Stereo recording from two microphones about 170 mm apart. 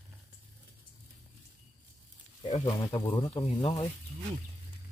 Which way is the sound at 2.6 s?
30° left (ahead or behind).